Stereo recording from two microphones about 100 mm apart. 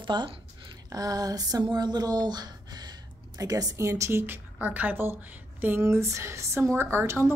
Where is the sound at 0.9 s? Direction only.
40° right (ahead or behind).